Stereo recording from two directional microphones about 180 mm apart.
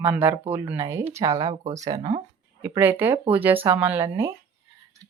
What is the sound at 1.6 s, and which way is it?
Speech, 40° right (ahead or behind).